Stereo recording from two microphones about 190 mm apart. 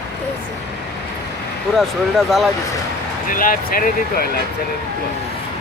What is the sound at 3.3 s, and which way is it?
Speech, 45° left (ahead or behind).